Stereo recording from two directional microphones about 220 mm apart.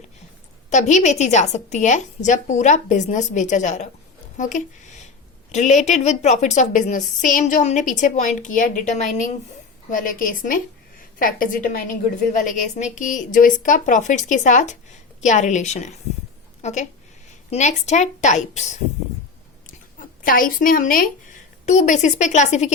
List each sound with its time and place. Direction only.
0.7 s a woman's voice: 35° left (ahead or behind)
20.2 s a woman's voice: 40° left (ahead or behind)